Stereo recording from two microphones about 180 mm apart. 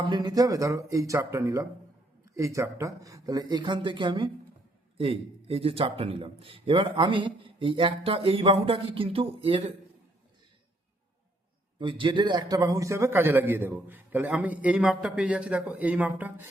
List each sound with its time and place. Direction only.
0.1 s a man's voice: 25° right (ahead or behind)
11.8 s a man's voice: 25° right (ahead or behind); by 16.5 s 10° right (ahead or behind)